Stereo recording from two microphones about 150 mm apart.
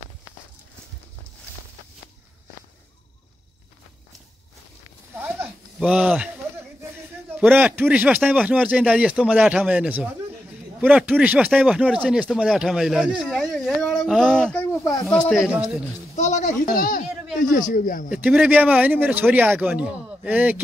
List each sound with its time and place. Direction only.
5.1 s a sound: 15° right (ahead or behind)
5.8 s speech: 10° right (ahead or behind)
7.3 s speech: 10° right (ahead or behind)
16.2 s a sound: 50° left (ahead or behind); by 17.0 s 70° left (ahead or behind)
17.4 s speech: 60° left (ahead or behind)
18.1 s speech: 10° right (ahead or behind)